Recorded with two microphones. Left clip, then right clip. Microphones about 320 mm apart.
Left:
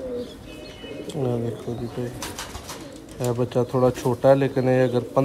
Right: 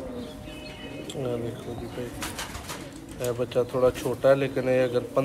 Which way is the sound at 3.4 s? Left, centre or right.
Left.